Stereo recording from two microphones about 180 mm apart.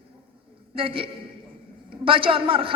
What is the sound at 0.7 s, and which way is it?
A man's voice, 30° right (ahead or behind).